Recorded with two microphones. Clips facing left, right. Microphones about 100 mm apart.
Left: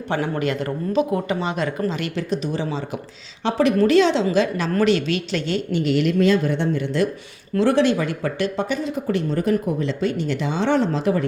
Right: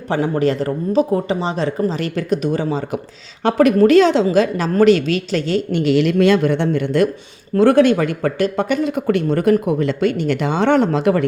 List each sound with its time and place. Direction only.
0.1 s speech: 35° right (ahead or behind)
2.3 s a woman's voice: 50° right (ahead or behind)
5.7 s speech: 90° right; by 11.3 s 70° right (ahead or behind)